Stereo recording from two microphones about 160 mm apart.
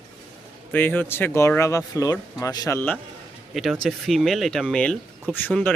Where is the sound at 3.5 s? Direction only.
Centre (ahead or behind).